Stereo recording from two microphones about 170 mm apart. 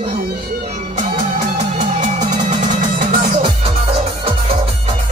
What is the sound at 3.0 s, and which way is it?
Music, 60° right (ahead or behind).